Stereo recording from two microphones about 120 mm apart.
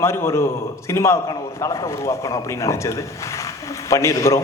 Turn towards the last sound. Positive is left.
turn(degrees=25)  # may be behind; listen again after turning